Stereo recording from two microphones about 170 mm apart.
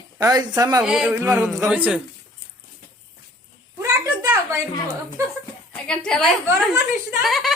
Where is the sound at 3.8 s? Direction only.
15° right (ahead or behind).